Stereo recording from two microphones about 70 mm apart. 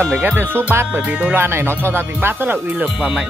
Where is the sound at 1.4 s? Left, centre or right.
Right.